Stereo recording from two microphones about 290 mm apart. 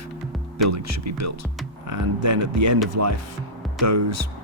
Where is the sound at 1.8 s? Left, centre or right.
Right.